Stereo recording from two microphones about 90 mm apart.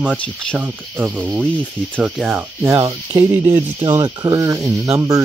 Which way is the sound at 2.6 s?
30° right (ahead or behind).